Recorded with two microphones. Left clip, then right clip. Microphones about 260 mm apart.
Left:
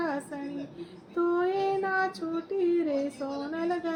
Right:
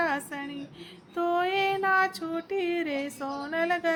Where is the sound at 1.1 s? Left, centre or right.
Right.